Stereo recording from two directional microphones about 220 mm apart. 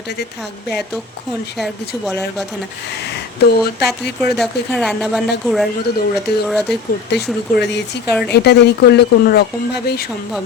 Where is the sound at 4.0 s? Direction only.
Centre (ahead or behind).